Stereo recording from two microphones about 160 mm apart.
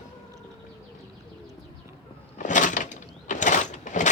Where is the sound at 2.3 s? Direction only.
50° left (ahead or behind).